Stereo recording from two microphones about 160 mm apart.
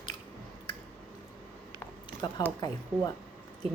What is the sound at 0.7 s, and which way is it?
Squish, 30° left (ahead or behind).